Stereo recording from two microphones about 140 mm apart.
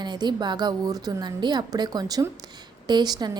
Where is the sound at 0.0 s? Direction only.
30° right (ahead or behind).